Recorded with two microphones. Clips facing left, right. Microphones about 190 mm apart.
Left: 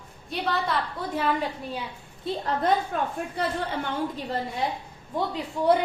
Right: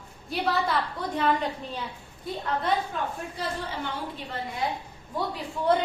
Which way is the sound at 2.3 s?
25° left (ahead or behind).